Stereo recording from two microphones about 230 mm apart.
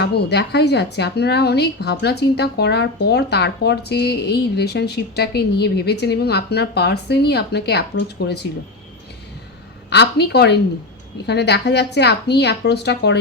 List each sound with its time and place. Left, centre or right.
0.0 s speech: left
9.9 s speech: left